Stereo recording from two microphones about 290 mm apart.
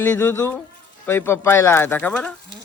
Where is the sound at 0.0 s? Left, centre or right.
Centre.